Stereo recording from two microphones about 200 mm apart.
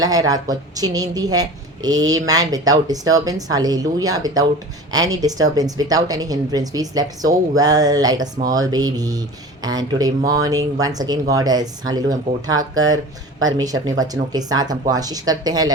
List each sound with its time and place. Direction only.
0.0 s a woman's voice: 20° right (ahead or behind)